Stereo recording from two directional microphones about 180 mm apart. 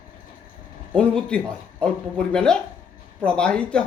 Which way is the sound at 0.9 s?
5° left (ahead or behind).